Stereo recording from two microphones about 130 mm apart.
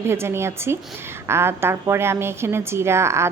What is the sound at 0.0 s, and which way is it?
A woman's voice, 20° right (ahead or behind).